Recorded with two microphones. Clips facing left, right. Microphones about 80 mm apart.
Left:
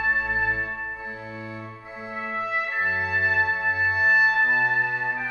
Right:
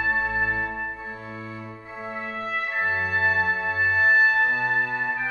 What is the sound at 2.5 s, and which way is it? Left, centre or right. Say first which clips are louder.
Music: right 1 dB; centre.